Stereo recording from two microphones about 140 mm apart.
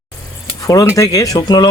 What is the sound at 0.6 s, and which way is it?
Speech, 25° left (ahead or behind).